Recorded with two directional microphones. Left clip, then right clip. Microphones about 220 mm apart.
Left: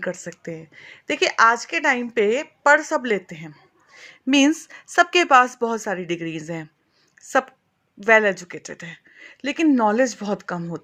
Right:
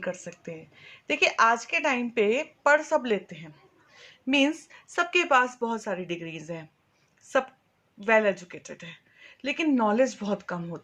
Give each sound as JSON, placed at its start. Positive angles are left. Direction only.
{"t": 0.0, "sound": "speech", "side_deg": 40}
{"t": 7.2, "sound": "a sound", "side_deg": 45}
{"t": 8.0, "sound": "speech", "side_deg": 40}